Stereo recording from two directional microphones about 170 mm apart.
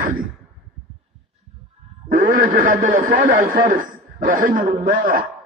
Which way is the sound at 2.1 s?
55° right (ahead or behind).